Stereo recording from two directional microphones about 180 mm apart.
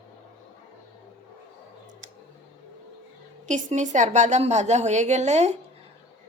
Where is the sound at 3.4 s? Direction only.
45° right (ahead or behind).